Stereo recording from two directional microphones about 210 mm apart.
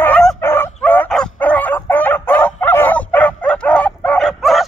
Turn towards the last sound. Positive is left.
turn(degrees=0)  # may be behind; listen again after turning